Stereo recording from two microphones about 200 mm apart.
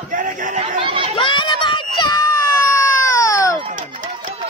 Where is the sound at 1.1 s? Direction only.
25° left (ahead or behind).